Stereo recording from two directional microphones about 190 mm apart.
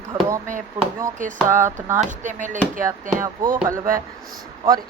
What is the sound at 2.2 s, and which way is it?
Speech, 40° right (ahead or behind).